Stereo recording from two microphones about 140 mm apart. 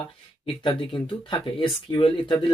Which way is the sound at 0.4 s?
40° left (ahead or behind).